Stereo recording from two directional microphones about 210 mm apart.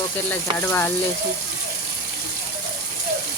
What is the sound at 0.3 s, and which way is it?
Speech, 10° left (ahead or behind).